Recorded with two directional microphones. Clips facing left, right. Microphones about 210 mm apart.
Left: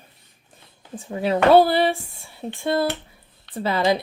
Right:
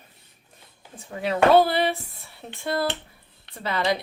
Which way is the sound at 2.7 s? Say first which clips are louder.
Left 3 dB; 25° left (ahead or behind).